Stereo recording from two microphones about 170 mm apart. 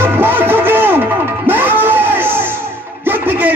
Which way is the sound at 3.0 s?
10° right (ahead or behind).